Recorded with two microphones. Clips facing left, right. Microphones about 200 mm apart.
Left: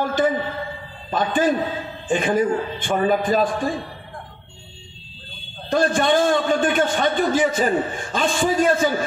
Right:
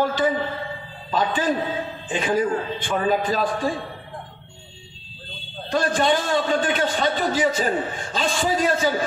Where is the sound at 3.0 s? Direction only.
50° left (ahead or behind).